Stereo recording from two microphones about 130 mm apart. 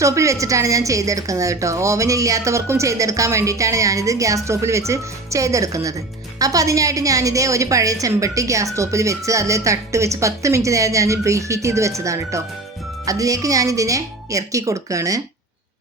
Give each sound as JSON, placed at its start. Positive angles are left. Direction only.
{"t": 0.0, "sound": "a woman's voice", "side_deg": -25}